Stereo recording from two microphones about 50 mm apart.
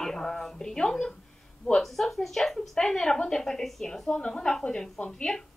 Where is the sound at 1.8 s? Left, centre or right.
Centre.